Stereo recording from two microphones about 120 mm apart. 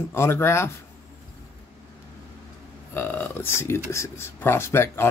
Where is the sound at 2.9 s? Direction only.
20° left (ahead or behind).